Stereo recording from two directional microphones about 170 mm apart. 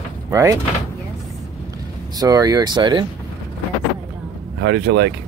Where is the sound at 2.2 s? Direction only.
20° right (ahead or behind).